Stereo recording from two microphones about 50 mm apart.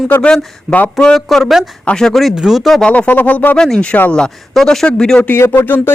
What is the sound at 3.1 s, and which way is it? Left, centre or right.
Speech, left.